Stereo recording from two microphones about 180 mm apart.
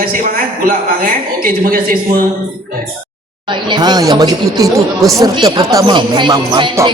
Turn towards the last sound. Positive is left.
turn(degrees=-20)  # may be behind; listen again after turning